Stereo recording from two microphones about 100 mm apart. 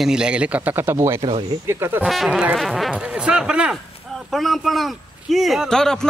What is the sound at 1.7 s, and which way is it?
Speech, 25° right (ahead or behind).